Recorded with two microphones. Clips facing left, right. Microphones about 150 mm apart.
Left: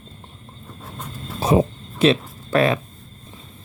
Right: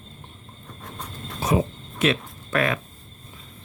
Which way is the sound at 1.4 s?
30° left (ahead or behind).